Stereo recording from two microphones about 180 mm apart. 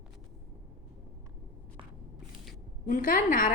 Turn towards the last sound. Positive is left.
turn(degrees=50)  # may be behind; listen again after turning